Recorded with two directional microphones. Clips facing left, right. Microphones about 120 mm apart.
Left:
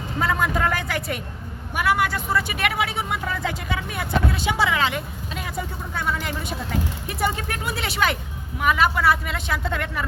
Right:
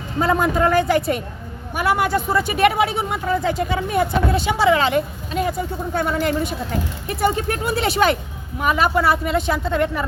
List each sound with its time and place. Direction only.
0.2 s speech: 35° right (ahead or behind)